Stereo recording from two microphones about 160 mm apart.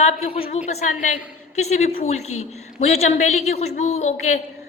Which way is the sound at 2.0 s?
40° left (ahead or behind).